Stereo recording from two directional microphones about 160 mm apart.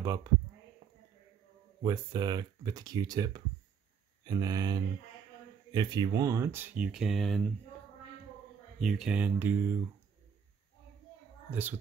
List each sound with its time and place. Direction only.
0.0 s speech: 25° right (ahead or behind)
1.8 s speech: 25° right (ahead or behind); by 7.4 s centre (ahead or behind)
8.7 s speech: centre (ahead or behind)